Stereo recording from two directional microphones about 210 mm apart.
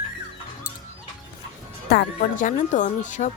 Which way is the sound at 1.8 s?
45° left (ahead or behind).